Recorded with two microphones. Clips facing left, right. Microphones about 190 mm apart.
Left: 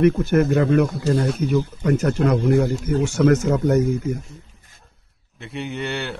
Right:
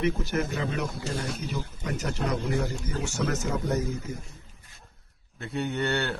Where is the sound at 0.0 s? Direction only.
55° left (ahead or behind).